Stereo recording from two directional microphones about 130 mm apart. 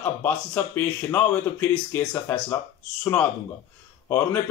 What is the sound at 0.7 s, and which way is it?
Speech, 15° left (ahead or behind).